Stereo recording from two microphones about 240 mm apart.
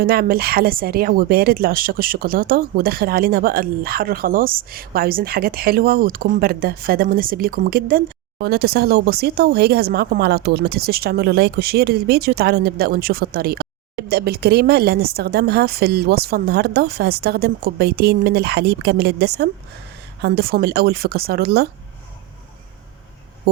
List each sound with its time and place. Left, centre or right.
0.0 s speech: right